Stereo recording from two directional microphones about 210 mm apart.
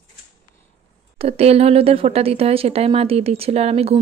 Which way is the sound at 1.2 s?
30° right (ahead or behind).